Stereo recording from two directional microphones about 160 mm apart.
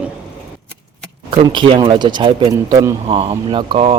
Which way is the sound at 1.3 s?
30° right (ahead or behind).